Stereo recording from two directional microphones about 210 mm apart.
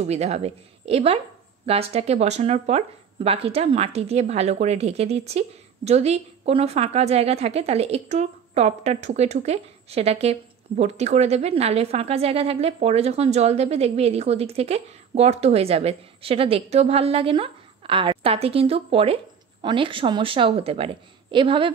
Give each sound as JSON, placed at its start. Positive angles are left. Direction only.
{"t": 0.0, "sound": "a woman's voice", "side_deg": -30}